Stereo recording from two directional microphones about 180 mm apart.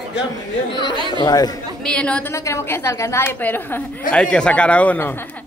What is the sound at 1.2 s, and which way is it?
Speech, 20° left (ahead or behind).